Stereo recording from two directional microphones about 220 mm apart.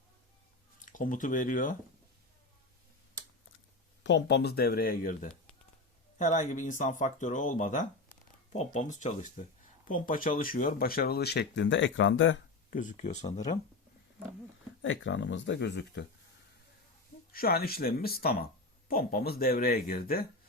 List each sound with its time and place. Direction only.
0.9 s speech: 35° left (ahead or behind)
4.0 s speech: 55° left (ahead or behind)
12.7 s speech: 35° left (ahead or behind)
14.8 s speech: 60° left (ahead or behind)
17.3 s speech: 45° left (ahead or behind)